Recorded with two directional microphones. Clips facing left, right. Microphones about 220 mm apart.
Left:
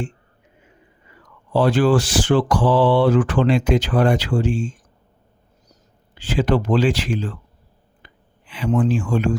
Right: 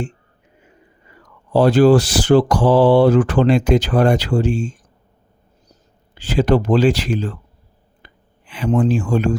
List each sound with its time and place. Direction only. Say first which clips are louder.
1.5 s speech: right 5 dB; 40° right (ahead or behind)
6.1 s speech: right 3 dB; 40° right (ahead or behind)
8.0 s a sound: right 2 dB; 45° right (ahead or behind)
8.8 s speech: right 3 dB; 40° right (ahead or behind)